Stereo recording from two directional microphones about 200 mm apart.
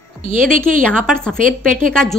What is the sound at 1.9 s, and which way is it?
Speech, 5° left (ahead or behind).